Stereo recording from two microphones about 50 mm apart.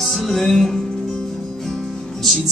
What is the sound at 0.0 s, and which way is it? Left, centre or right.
Music, centre.